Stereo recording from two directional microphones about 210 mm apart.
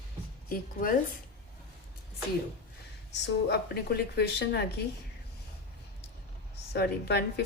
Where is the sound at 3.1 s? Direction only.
55° left (ahead or behind).